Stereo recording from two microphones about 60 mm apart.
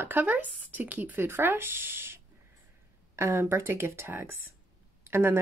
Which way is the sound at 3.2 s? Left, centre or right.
Right.